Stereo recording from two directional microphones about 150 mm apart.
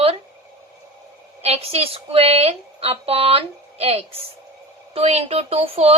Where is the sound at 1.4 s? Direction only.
45° right (ahead or behind).